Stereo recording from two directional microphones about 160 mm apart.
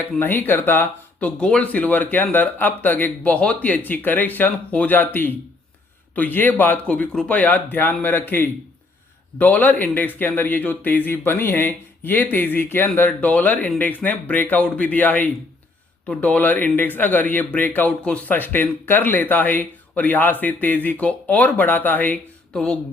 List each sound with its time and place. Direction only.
0.0 s speech: 10° left (ahead or behind)